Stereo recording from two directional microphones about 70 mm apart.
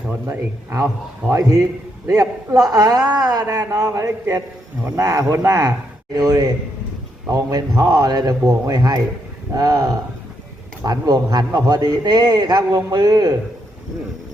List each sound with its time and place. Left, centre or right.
0.3 s a man's voice: right
1.3 s a man's voice: right
3.7 s a man's voice: right
9.6 s a man's voice: right
10.8 s a man's voice: right